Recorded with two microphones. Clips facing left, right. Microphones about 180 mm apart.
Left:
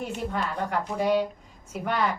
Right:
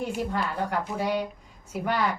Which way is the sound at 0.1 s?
5° right (ahead or behind).